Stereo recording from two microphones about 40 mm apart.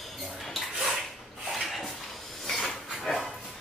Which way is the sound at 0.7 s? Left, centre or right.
Centre.